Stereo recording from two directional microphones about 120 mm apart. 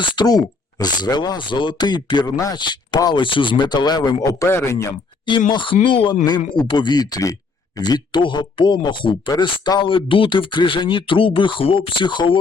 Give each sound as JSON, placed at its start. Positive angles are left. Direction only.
{"t": 0.0, "sound": "speech", "side_deg": 40}
{"t": 5.5, "sound": "speech", "side_deg": 45}